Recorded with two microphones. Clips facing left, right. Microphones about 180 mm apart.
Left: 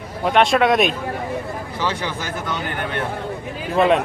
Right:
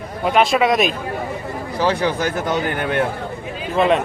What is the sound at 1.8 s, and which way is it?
Speech, 35° right (ahead or behind).